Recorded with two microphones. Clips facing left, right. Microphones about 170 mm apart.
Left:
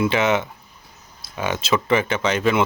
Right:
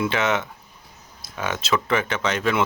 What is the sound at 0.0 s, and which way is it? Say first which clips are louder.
Speech: left 3 dB; centre (ahead or behind).